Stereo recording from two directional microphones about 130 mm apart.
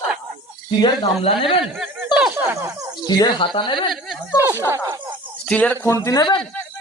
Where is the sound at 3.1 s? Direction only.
35° left (ahead or behind).